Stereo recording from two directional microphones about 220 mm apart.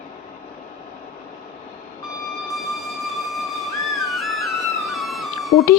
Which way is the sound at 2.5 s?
Centre (ahead or behind).